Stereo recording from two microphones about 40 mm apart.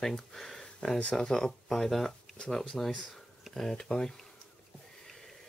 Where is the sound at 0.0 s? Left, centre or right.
Centre.